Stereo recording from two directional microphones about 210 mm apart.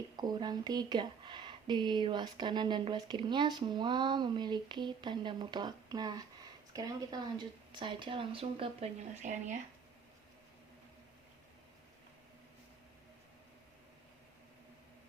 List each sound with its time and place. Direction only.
0.2 s speech: 20° right (ahead or behind)